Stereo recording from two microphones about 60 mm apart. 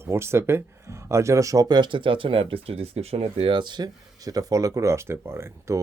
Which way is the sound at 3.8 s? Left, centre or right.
Right.